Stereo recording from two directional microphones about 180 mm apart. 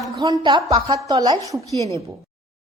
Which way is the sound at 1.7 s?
15° left (ahead or behind).